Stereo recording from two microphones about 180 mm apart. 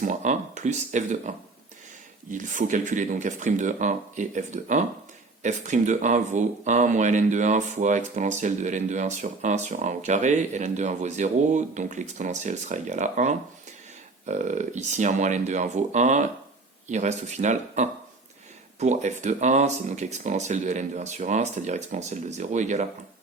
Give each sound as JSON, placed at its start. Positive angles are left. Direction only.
{"t": 0.0, "sound": "speech", "side_deg": -45}
{"t": 2.3, "sound": "speech", "side_deg": -45}